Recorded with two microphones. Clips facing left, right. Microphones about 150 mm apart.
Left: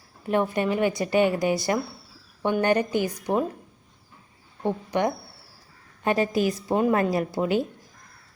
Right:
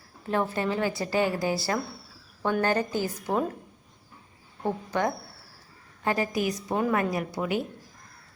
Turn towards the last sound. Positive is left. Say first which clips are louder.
# left 5 dB
turn(degrees=30)  # may be behind; listen again after turning